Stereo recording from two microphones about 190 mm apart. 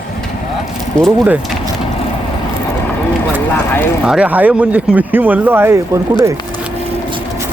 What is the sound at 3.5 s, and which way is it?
Speech, 10° left (ahead or behind).